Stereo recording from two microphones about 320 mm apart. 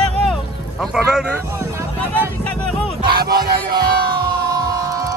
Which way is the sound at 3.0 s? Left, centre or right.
Right.